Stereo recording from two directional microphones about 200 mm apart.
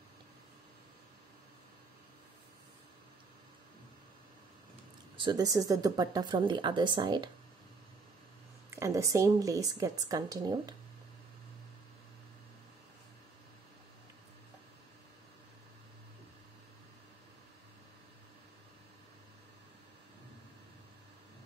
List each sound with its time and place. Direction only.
5.1 s speech: 20° right (ahead or behind)
8.6 s speech: 15° right (ahead or behind)